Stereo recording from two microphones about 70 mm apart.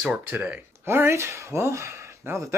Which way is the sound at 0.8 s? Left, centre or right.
Right.